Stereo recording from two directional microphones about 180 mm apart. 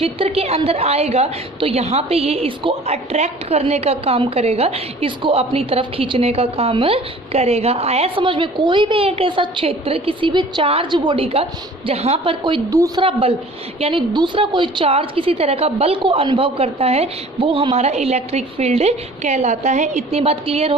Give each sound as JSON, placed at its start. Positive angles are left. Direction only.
{"t": 0.0, "sound": "a woman's voice", "side_deg": -35}